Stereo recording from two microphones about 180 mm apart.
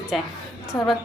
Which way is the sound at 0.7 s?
20° left (ahead or behind).